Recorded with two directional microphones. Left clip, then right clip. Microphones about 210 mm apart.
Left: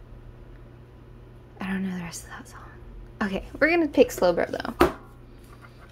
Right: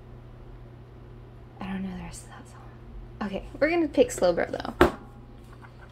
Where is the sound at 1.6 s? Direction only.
20° left (ahead or behind).